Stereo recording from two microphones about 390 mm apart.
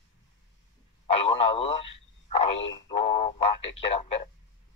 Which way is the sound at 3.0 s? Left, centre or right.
Centre.